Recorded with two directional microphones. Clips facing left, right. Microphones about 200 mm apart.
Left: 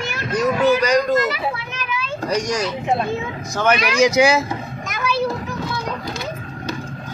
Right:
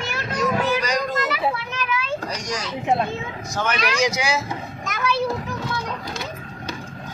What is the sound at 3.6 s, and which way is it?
Speech, 55° left (ahead or behind).